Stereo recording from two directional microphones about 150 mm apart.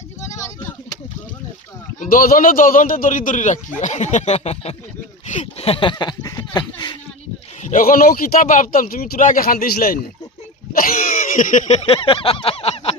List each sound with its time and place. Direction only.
0.2 s a sound: 20° left (ahead or behind)
2.0 s a man's voice: 70° left (ahead or behind); by 6.9 s 30° left (ahead or behind)
7.6 s speech: 60° left (ahead or behind); by 10.0 s 75° left (ahead or behind)
10.7 s throat clearing: 70° left (ahead or behind)
11.8 s speech: 40° left (ahead or behind)